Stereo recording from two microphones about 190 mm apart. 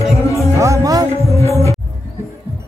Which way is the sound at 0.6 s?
15° right (ahead or behind).